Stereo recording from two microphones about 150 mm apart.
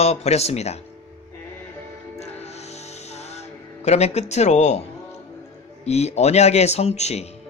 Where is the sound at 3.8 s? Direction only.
45° left (ahead or behind).